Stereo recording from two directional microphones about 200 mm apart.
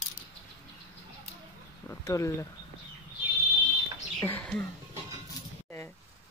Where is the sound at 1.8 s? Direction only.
15° left (ahead or behind).